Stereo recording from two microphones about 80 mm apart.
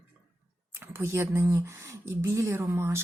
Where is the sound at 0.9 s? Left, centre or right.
Right.